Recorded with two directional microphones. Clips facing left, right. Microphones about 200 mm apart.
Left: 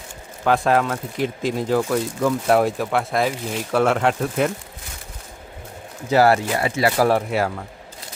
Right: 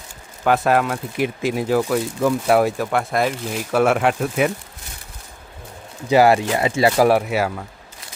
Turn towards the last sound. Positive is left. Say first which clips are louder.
# right 2 dB
turn(degrees=-5)  # may be behind; listen again after turning